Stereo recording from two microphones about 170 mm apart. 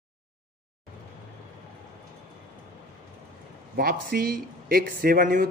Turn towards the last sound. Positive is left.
turn(degrees=-55)  # may be behind; listen again after turning